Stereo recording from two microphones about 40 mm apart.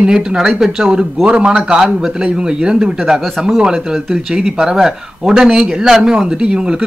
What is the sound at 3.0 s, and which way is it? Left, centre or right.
Speech, centre.